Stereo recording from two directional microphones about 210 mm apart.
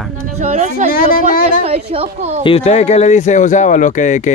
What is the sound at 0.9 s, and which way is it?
Speech, 45° left (ahead or behind).